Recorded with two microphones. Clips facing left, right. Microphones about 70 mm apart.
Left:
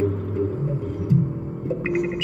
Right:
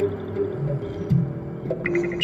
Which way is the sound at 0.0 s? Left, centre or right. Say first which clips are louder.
Even; right.